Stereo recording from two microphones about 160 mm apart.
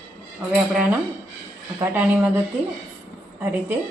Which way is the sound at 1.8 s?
10° right (ahead or behind).